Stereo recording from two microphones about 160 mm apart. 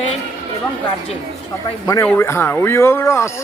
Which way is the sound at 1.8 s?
20° left (ahead or behind).